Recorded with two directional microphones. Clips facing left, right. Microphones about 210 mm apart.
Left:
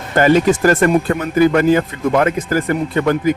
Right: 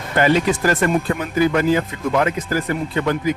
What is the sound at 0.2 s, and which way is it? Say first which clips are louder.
Speech: left 5 dB; 45° left (ahead or behind).